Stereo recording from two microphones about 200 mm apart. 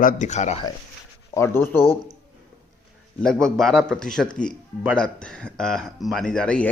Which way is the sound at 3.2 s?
5° left (ahead or behind).